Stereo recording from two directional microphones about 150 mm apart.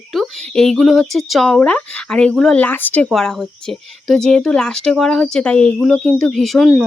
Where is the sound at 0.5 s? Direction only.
5° left (ahead or behind).